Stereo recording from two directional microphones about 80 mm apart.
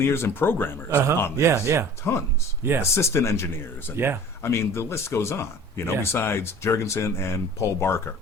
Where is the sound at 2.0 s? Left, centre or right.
Left.